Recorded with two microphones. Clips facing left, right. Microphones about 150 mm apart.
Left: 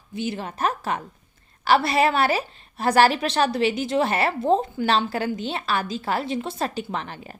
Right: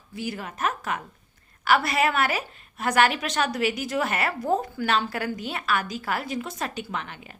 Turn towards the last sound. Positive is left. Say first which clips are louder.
# left 3 dB
turn(degrees=35)  # may be behind; listen again after turning